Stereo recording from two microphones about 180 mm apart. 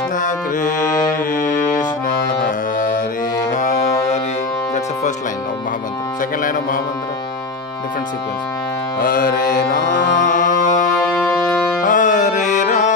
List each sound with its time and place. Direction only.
0.2 s music: 45° left (ahead or behind)
9.0 s music: 50° left (ahead or behind)